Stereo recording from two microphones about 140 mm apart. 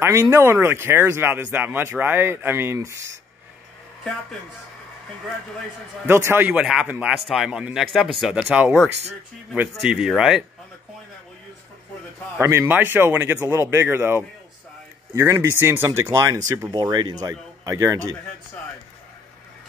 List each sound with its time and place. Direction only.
0.0 s speech: 20° right (ahead or behind)
6.0 s a man's voice: 15° right (ahead or behind)
12.4 s speech: 20° right (ahead or behind)